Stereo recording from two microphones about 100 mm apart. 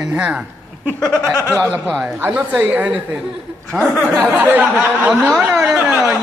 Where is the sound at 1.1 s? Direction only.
25° right (ahead or behind); by 5.9 s 10° right (ahead or behind).